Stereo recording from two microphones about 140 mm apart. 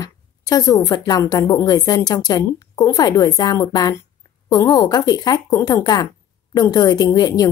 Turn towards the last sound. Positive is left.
turn(degrees=25)  # may be behind; listen again after turning